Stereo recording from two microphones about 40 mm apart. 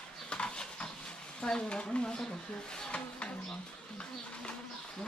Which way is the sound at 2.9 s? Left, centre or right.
Left.